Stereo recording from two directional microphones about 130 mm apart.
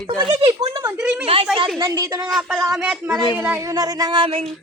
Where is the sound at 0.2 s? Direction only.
40° right (ahead or behind).